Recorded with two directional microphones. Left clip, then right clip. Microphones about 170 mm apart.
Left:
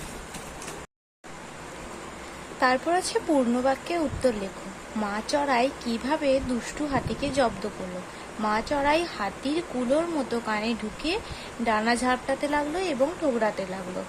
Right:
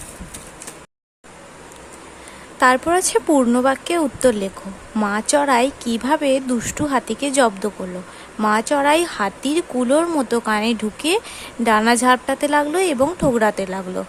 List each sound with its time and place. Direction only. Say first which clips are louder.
2.6 s speech: right 8 dB; 30° right (ahead or behind)